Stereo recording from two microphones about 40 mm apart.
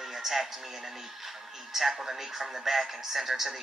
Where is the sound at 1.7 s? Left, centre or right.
Centre.